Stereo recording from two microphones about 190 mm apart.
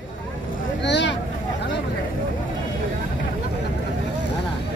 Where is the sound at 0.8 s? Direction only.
70° left (ahead or behind).